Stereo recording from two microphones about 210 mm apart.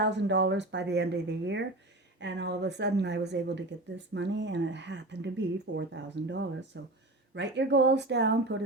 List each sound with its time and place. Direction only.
0.0 s a woman's voice: 55° right (ahead or behind)